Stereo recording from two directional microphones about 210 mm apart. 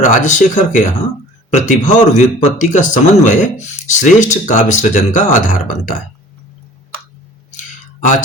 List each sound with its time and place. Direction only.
0.0 s speech: 35° left (ahead or behind)